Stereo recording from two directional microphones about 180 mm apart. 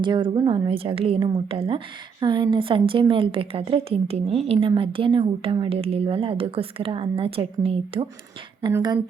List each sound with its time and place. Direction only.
0.0 s a woman's voice: 25° right (ahead or behind)